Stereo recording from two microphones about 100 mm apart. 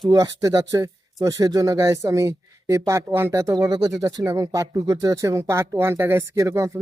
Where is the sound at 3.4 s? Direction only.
35° right (ahead or behind).